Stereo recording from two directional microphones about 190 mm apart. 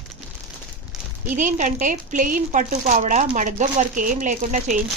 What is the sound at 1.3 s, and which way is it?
A woman's voice, 40° right (ahead or behind).